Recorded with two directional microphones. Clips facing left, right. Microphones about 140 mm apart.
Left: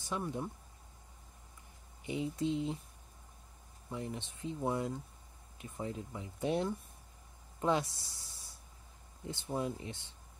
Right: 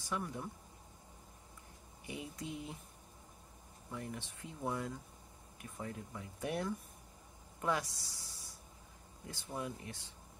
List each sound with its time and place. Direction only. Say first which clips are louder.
0.0 s speech: left 3 dB; 25° left (ahead or behind)
2.0 s speech: left 10 dB; 25° left (ahead or behind)
3.9 s speech: left 4 dB; 20° left (ahead or behind)